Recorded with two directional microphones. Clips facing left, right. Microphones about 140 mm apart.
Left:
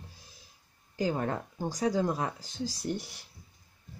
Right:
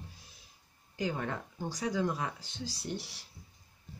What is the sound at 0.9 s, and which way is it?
Speech, 35° left (ahead or behind).